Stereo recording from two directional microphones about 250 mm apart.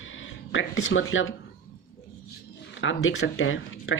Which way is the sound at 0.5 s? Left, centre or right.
Left.